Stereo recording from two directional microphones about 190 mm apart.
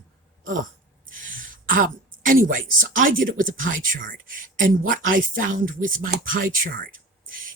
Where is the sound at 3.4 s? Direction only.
45° right (ahead or behind).